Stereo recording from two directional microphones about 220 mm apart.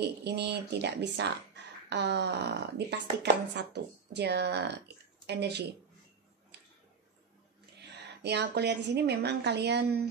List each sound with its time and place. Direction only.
0.0 s speech: 50° right (ahead or behind)
7.8 s speech: 50° right (ahead or behind)